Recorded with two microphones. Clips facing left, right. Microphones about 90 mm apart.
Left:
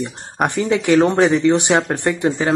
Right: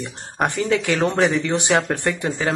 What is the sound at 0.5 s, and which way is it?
Speech, 20° left (ahead or behind).